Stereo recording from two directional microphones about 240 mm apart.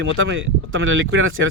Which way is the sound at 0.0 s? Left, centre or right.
Right.